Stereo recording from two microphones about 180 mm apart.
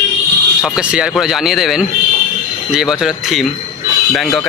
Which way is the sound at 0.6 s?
5° right (ahead or behind).